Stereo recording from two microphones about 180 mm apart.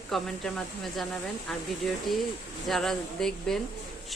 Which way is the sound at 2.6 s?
Centre (ahead or behind).